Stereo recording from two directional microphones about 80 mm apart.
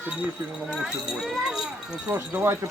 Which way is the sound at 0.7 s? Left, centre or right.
Centre.